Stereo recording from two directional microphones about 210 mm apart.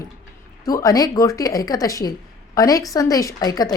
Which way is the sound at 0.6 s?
15° left (ahead or behind).